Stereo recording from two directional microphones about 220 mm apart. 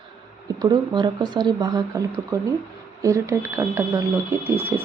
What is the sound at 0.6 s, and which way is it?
Speech, 20° right (ahead or behind).